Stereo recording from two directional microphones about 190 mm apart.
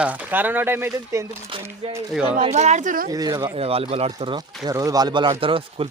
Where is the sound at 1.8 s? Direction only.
30° right (ahead or behind).